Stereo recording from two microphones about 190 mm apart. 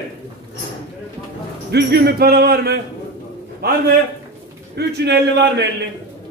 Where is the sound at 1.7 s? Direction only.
60° right (ahead or behind).